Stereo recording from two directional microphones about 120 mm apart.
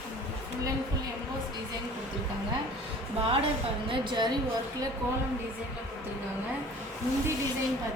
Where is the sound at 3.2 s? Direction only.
55° right (ahead or behind).